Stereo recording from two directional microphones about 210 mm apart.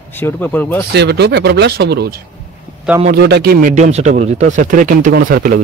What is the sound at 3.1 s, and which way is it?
Speech, 50° right (ahead or behind).